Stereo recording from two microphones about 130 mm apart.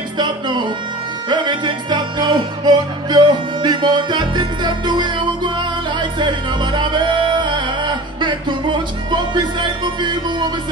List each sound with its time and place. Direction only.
0.2 s music: 35° right (ahead or behind)